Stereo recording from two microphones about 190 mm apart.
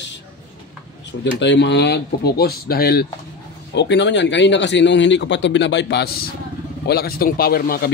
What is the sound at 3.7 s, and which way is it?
A man's voice, 65° left (ahead or behind).